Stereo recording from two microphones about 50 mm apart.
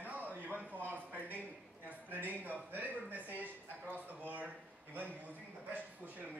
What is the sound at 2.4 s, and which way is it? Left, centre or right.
A man's voice, right.